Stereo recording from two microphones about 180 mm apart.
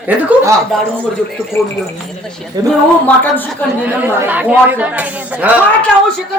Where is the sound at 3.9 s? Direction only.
10° right (ahead or behind).